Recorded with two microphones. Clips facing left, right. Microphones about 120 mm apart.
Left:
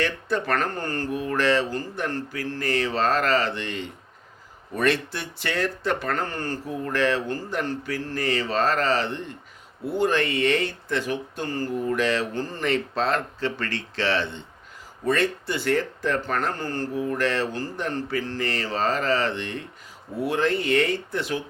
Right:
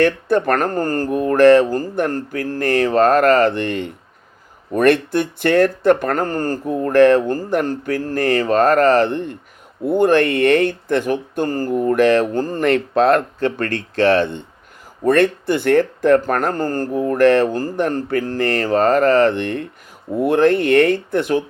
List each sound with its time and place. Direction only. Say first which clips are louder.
0.0 s speech: right 10 dB; 55° right (ahead or behind)